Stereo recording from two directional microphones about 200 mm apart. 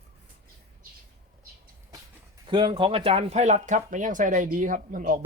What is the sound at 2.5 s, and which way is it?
Speech, 25° right (ahead or behind).